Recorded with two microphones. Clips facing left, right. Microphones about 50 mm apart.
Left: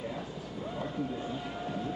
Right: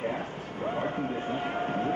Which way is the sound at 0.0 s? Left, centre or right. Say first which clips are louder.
Right 6 dB; right.